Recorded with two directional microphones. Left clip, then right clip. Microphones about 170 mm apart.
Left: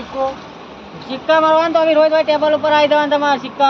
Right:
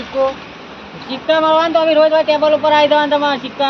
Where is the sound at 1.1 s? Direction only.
15° right (ahead or behind).